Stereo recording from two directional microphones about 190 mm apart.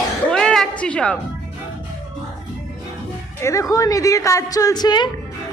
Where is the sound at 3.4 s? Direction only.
15° left (ahead or behind).